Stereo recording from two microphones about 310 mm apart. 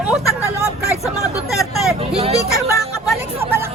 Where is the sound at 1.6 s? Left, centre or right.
Centre.